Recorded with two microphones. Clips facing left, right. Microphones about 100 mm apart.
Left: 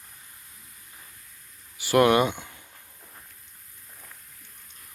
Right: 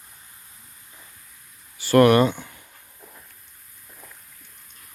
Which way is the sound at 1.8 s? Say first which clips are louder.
Right 4 dB; 15° left (ahead or behind).